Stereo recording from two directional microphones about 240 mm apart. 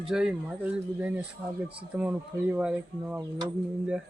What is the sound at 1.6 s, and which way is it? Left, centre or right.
Speech, centre.